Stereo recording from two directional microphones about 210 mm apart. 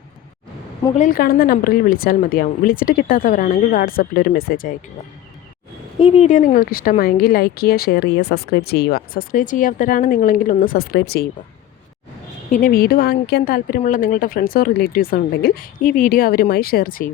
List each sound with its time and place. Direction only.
0.9 s a woman's voice: 40° left (ahead or behind)
6.0 s a woman's voice: 30° left (ahead or behind); by 11.3 s 50° left (ahead or behind)
12.5 s a woman's voice: 40° left (ahead or behind)